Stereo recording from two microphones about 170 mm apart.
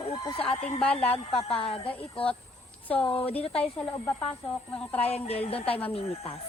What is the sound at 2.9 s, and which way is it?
Speech, 10° left (ahead or behind).